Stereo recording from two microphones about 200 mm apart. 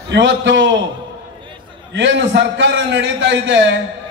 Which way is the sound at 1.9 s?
65° right (ahead or behind).